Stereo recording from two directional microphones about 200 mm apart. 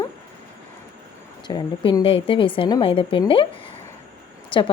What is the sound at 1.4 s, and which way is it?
Speech, 20° left (ahead or behind).